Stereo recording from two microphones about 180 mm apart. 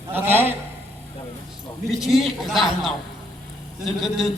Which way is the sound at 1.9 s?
Centre (ahead or behind).